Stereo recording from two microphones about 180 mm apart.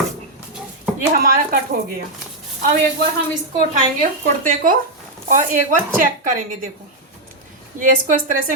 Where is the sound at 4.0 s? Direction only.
45° right (ahead or behind).